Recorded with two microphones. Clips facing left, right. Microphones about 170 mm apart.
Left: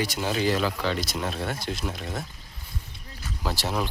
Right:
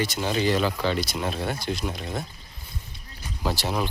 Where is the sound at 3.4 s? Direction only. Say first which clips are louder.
Right 2 dB; centre (ahead or behind).